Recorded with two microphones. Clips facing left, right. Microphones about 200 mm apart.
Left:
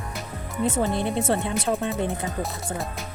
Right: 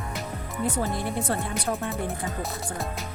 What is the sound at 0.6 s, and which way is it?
Speech, 25° left (ahead or behind).